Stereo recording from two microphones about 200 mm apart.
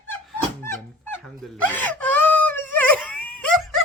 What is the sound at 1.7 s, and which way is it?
Wail, 10° left (ahead or behind).